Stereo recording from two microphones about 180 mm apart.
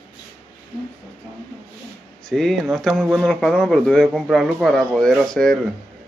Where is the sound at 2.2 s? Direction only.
Centre (ahead or behind).